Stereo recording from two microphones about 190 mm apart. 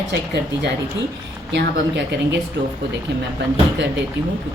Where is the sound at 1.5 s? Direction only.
65° right (ahead or behind).